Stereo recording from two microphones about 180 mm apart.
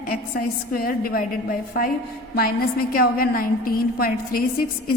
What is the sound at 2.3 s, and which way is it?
A woman's voice, 55° left (ahead or behind).